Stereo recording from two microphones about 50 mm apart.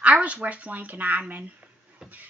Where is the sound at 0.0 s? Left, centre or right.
Right.